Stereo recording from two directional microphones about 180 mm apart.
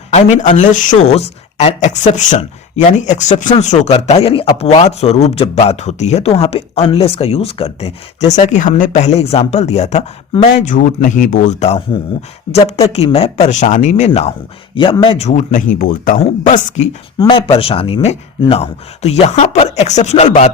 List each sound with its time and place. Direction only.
0.3 s speech: 45° left (ahead or behind)
17.2 s speech: 30° left (ahead or behind)